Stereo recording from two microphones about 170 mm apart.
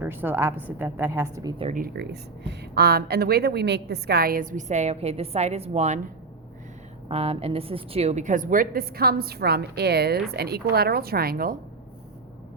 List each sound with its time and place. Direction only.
0.0 s a woman's voice: 10° right (ahead or behind)
1.7 s speech: 65° right (ahead or behind); by 6.0 s 40° right (ahead or behind)
7.1 s a woman's voice: 35° right (ahead or behind); by 11.5 s 60° right (ahead or behind)